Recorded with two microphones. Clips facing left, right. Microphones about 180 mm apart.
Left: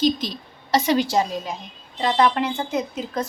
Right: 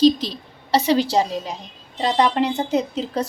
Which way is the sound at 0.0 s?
30° right (ahead or behind).